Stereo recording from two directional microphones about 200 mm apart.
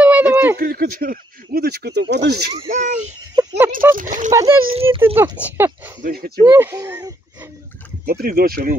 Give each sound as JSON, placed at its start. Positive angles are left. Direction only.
{"t": 0.0, "sound": "a sound", "side_deg": -5}
{"t": 0.6, "sound": "speech", "side_deg": -50}
{"t": 2.5, "sound": "speech", "side_deg": -35}
{"t": 3.3, "sound": "speech", "side_deg": -10}
{"t": 3.9, "sound": "speech", "side_deg": -40}
{"t": 4.3, "sound": "speech", "side_deg": -15}
{"t": 4.7, "sound": "speech", "side_deg": -25}
{"t": 5.1, "sound": "speech", "side_deg": -10}
{"t": 6.0, "sound": "speech", "side_deg": -50}
{"t": 6.4, "sound": "speech", "side_deg": -15}
{"t": 8.0, "sound": "speech", "side_deg": -50}